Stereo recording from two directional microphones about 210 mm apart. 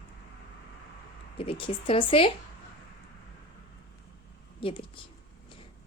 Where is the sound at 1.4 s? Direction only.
25° left (ahead or behind).